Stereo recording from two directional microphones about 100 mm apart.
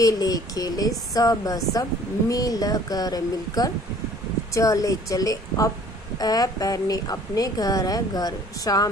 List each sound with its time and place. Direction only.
0.0 s a woman's voice: 40° left (ahead or behind)